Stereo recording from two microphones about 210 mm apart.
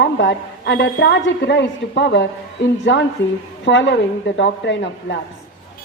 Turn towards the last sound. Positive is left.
turn(degrees=60)  # may be behind; listen again after turning